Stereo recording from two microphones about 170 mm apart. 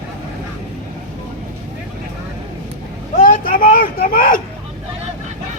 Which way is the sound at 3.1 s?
55° left (ahead or behind).